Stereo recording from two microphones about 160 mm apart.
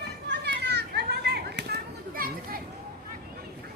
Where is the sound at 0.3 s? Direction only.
90° right; by 2.6 s 65° right (ahead or behind).